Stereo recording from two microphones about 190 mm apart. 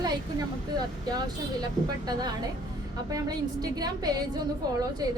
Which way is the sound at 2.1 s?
20° right (ahead or behind).